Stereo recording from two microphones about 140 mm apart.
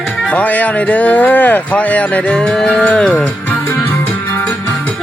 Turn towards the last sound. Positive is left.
turn(degrees=5)  # may be behind; listen again after turning